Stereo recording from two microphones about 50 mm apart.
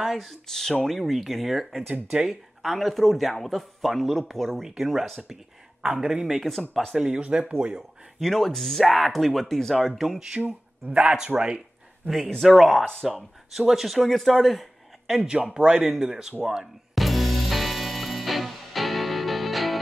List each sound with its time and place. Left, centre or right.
0.0 s speech: centre
5.8 s speech: centre
7.2 s speech: right
8.2 s speech: centre
11.0 s speech: centre
12.4 s speech: centre
15.0 s speech: centre
16.9 s music: centre